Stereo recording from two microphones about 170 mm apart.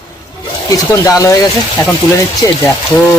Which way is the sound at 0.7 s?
20° left (ahead or behind).